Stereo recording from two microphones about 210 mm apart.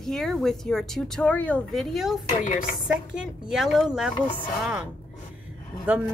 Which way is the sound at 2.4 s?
40° left (ahead or behind).